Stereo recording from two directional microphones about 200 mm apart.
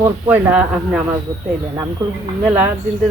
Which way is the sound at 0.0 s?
10° right (ahead or behind).